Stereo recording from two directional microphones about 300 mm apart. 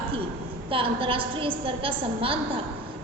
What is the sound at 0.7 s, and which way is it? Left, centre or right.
A woman's voice, centre.